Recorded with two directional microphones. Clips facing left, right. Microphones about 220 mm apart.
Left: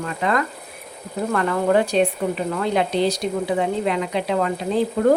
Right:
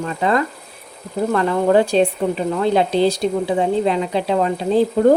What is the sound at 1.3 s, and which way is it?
Speech, 30° right (ahead or behind).